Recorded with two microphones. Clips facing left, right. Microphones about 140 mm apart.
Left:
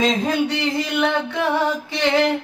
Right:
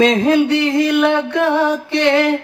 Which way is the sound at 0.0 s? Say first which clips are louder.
Right 7 dB; 65° right (ahead or behind).